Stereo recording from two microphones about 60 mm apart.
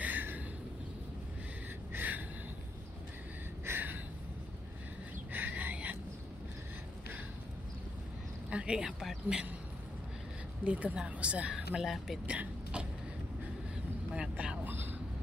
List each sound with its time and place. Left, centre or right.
0.0 s a sound: right
1.9 s gasp: right
3.7 s a sound: right
5.3 s a sound: right
8.5 s speech: centre
10.6 s speech: right
11.7 s speech: centre
12.3 s speech: centre
14.3 s vehicle: right
14.6 s vehicle: right